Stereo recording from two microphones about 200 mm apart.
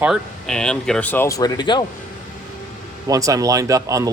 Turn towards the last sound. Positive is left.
turn(degrees=-15)  # may be behind; listen again after turning